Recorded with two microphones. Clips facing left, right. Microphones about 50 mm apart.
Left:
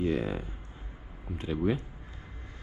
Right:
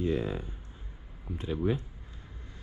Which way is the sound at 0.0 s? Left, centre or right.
Left.